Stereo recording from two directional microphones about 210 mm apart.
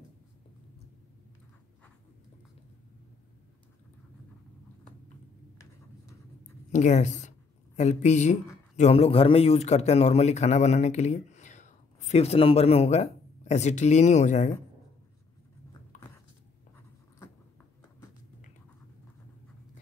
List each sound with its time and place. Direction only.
6.7 s speech: 35° left (ahead or behind)